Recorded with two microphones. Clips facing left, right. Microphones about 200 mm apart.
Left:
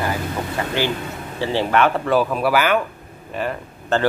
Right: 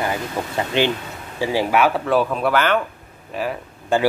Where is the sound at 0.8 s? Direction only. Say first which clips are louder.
Right 4 dB; 20° right (ahead or behind); by 2.8 s 5° left (ahead or behind).